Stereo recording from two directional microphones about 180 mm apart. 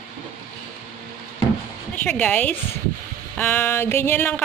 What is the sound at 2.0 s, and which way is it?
Speech, 10° left (ahead or behind).